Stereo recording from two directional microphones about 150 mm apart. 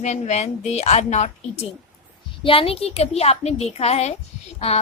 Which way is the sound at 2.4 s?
40° left (ahead or behind).